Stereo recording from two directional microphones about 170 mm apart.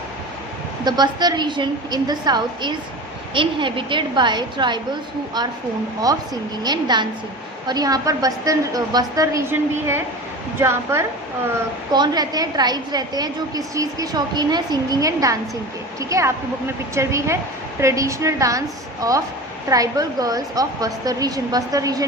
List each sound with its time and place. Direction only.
0.9 s a woman's voice: 25° right (ahead or behind)
6.6 s a woman's voice: 25° right (ahead or behind)